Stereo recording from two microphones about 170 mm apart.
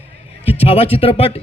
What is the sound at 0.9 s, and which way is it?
Speech, 35° left (ahead or behind).